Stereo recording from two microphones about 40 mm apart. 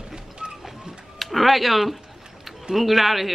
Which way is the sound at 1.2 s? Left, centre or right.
Centre.